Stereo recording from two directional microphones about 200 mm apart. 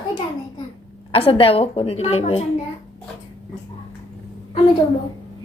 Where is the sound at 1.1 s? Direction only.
30° left (ahead or behind).